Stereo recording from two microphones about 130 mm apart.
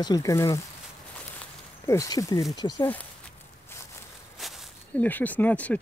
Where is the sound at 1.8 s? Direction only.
25° left (ahead or behind).